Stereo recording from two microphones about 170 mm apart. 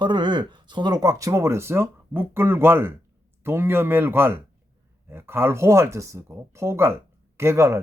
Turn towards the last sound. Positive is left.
turn(degrees=-15)  # may be behind; listen again after turning